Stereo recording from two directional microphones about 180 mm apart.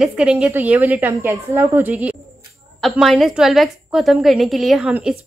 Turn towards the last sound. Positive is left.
turn(degrees=-5)  # may be behind; listen again after turning